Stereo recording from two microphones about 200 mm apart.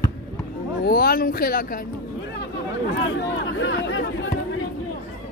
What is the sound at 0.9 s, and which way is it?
Speech, 50° left (ahead or behind).